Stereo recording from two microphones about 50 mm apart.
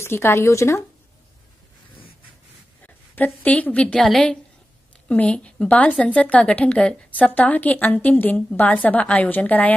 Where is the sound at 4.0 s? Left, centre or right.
Centre.